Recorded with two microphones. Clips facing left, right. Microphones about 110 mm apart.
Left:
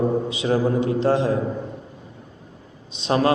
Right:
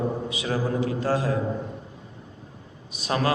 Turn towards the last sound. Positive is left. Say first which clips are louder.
# left 5 dB
turn(degrees=30)  # may be behind; listen again after turning